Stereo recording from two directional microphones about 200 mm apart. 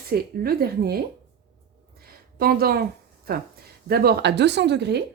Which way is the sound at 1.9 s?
50° right (ahead or behind).